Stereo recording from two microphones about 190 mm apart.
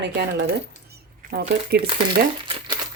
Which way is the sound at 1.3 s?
55° right (ahead or behind).